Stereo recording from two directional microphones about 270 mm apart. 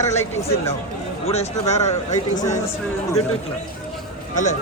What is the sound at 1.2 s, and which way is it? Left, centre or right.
Speech, left.